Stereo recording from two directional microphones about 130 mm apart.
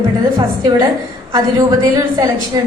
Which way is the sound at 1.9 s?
30° right (ahead or behind).